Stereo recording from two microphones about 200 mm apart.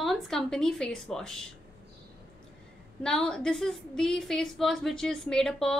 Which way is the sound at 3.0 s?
5° left (ahead or behind).